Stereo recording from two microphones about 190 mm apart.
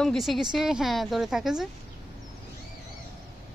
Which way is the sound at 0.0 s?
Centre (ahead or behind).